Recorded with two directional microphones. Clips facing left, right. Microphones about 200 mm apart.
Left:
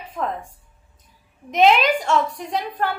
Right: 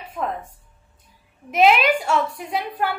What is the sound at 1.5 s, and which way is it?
A woman's voice, 5° right (ahead or behind).